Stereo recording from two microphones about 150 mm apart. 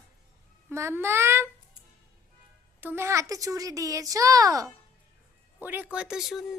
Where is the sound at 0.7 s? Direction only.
15° right (ahead or behind).